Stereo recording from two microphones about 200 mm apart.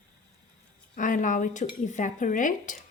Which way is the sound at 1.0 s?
40° left (ahead or behind).